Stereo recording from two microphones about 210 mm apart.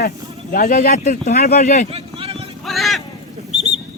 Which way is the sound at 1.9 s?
30° right (ahead or behind).